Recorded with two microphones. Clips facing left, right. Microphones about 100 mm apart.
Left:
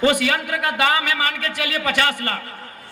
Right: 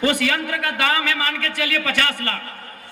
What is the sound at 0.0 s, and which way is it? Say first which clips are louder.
A man's voice: left 2 dB; 20° left (ahead or behind).